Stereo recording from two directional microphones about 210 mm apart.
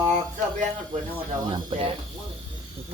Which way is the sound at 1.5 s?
20° right (ahead or behind).